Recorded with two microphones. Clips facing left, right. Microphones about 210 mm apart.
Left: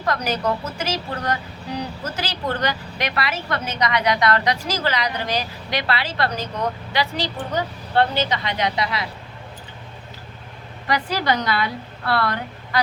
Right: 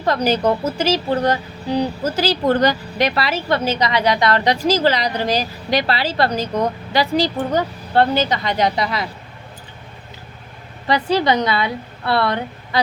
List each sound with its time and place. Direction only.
0.0 s a woman's voice: 30° right (ahead or behind)
10.8 s speech: 25° right (ahead or behind)